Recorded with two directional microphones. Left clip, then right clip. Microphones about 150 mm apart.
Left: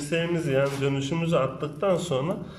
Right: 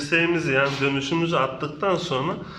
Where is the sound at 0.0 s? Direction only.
20° left (ahead or behind).